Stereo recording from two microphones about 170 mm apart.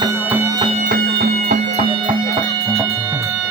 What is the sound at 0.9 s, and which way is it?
Music, 55° right (ahead or behind).